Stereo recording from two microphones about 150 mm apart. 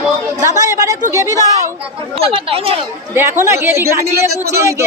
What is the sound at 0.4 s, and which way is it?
A woman's voice, 20° right (ahead or behind).